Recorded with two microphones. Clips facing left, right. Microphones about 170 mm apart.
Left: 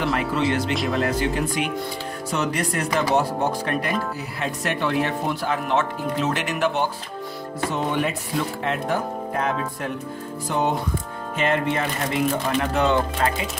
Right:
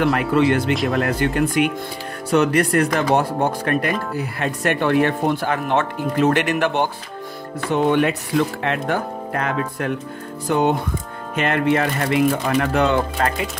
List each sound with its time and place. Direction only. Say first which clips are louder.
0.0 s speech: right 6 dB; 60° right (ahead or behind)
7.7 s speech: right 8 dB; 70° right (ahead or behind)
11.3 s speech: right 4 dB; 65° right (ahead or behind)